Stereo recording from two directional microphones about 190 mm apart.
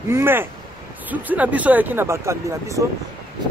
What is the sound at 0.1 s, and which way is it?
Speech, 10° right (ahead or behind).